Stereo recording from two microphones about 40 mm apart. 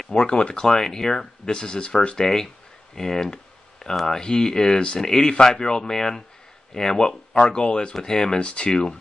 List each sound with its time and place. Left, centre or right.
0.1 s speech: left
2.1 s speech: centre
8.4 s speech: left